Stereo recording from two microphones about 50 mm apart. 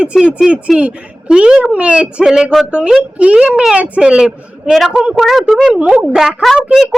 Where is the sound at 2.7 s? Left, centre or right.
Centre.